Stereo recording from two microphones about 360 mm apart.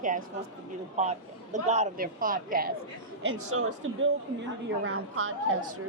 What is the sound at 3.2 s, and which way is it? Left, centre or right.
Speech, right.